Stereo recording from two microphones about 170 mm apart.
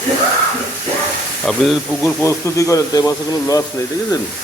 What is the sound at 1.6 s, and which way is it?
Speech, centre (ahead or behind).